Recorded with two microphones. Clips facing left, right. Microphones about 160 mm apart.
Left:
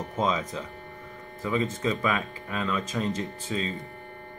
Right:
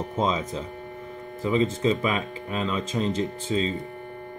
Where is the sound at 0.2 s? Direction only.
25° right (ahead or behind).